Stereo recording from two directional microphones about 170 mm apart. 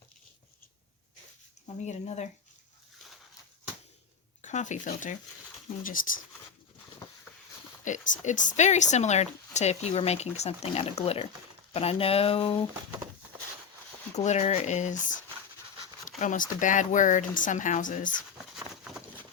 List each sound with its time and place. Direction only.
1.6 s speech: 40° left (ahead or behind)
4.4 s speech: 45° left (ahead or behind)
7.9 s speech: 45° left (ahead or behind)
14.1 s speech: 40° left (ahead or behind)
16.0 s speech: 50° left (ahead or behind)
18.1 s a sound: centre (ahead or behind)